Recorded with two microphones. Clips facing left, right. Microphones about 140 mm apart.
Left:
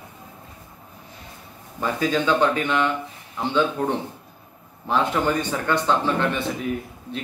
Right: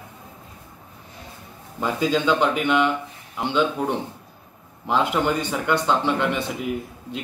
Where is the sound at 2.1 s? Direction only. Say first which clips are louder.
Left 1 dB; 15° right (ahead or behind).